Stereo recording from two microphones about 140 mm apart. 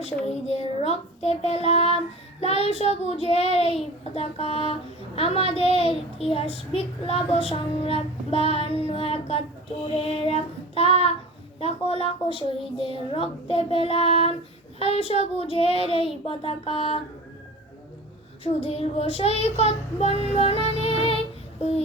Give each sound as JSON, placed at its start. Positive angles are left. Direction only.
{"t": 0.0, "sound": "child singing", "side_deg": 50}
{"t": 18.4, "sound": "child singing", "side_deg": 45}